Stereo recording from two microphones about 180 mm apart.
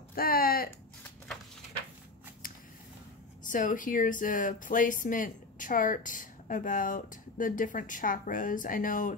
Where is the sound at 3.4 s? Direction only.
45° left (ahead or behind).